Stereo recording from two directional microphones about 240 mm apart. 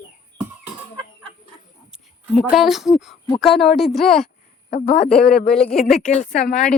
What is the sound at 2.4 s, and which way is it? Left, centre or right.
Speech, centre.